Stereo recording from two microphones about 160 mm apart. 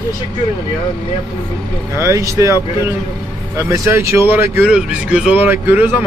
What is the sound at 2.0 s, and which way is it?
Speech, 20° right (ahead or behind).